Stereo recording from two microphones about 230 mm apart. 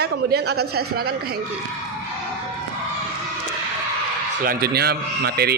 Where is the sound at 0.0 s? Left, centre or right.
Right.